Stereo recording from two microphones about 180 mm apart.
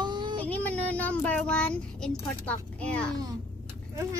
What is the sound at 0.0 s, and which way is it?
Child singing, 25° right (ahead or behind).